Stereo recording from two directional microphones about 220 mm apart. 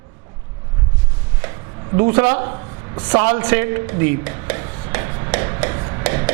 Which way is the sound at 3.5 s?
10° right (ahead or behind).